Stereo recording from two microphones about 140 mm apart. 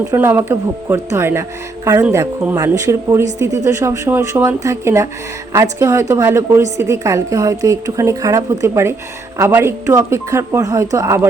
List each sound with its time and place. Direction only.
0.0 s a woman's voice: 20° right (ahead or behind)